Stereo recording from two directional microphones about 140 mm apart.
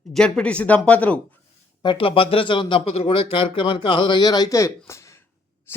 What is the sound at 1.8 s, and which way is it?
Speech, 35° left (ahead or behind).